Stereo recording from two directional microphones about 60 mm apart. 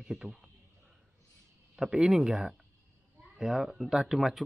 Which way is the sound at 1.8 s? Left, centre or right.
Centre.